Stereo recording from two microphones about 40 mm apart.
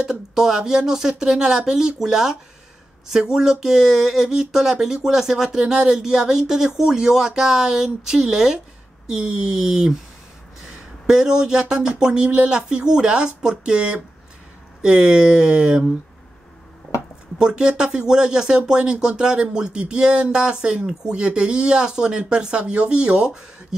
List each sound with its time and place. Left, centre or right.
0.1 s speech: centre
11.1 s speech: centre
17.4 s speech: right